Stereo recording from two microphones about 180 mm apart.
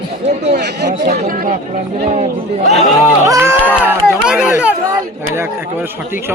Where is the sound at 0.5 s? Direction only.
65° right (ahead or behind).